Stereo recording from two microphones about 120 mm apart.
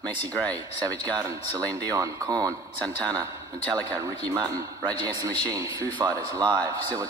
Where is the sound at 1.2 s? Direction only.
30° right (ahead or behind).